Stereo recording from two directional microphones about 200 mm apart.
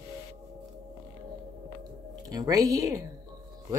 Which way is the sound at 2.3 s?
20° right (ahead or behind).